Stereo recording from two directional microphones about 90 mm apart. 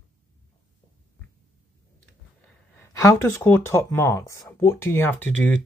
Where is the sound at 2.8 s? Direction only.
30° left (ahead or behind).